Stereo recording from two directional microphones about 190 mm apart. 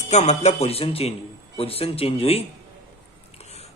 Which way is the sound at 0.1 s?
35° left (ahead or behind).